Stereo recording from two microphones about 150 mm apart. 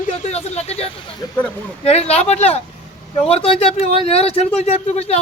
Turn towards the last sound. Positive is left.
turn(degrees=45)  # may be behind; listen again after turning